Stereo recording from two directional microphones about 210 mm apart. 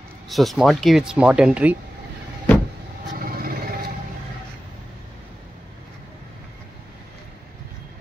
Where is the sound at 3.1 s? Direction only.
45° right (ahead or behind).